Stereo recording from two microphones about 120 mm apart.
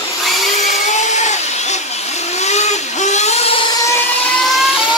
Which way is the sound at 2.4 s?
70° left (ahead or behind).